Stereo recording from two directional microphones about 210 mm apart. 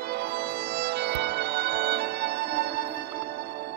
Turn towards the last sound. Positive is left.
turn(degrees=-50)  # may be behind; listen again after turning